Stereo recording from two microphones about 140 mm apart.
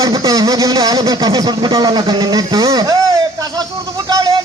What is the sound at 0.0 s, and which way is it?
Speech, 25° right (ahead or behind).